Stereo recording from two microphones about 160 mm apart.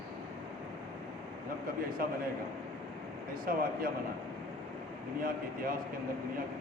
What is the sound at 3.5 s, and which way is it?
Speech, 65° right (ahead or behind).